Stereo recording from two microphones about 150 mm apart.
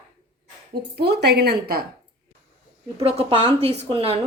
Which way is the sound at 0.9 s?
90° right.